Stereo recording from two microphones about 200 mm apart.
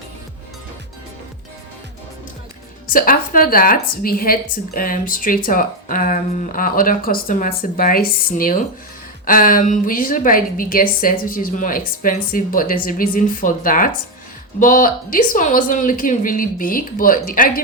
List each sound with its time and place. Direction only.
2.9 s a woman's voice: 45° left (ahead or behind)